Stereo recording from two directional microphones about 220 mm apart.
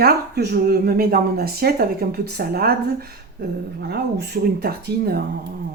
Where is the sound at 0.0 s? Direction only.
45° right (ahead or behind).